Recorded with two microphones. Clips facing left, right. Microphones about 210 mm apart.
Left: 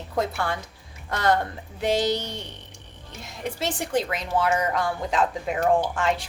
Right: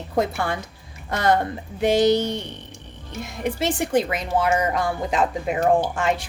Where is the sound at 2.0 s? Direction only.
50° right (ahead or behind).